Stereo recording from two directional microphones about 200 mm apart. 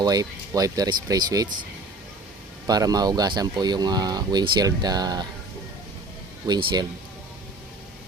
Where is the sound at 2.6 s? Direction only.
20° right (ahead or behind).